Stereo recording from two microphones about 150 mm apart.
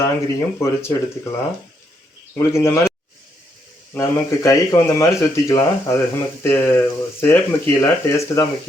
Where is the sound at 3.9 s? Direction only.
20° left (ahead or behind).